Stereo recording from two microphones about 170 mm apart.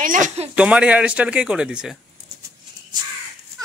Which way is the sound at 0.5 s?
5° right (ahead or behind).